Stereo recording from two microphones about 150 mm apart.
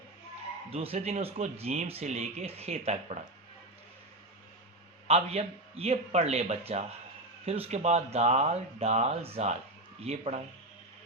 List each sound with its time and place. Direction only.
0.7 s speech: 40° right (ahead or behind)
5.0 s speech: 45° right (ahead or behind)